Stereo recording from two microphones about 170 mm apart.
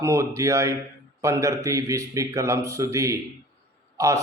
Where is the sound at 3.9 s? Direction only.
20° right (ahead or behind).